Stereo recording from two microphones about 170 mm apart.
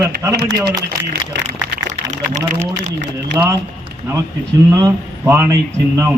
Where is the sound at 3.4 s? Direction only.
15° right (ahead or behind).